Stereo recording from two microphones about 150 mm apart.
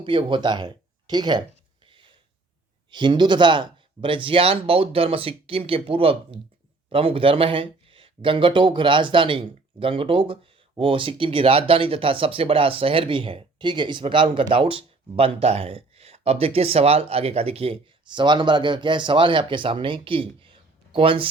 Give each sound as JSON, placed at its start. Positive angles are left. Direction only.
{"t": 0.0, "sound": "speech", "side_deg": -35}
{"t": 1.9, "sound": "a sound", "side_deg": -35}
{"t": 2.9, "sound": "speech", "side_deg": -30}